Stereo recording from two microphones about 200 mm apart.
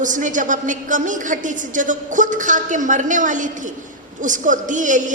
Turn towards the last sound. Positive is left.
turn(degrees=-40)  # may be behind; listen again after turning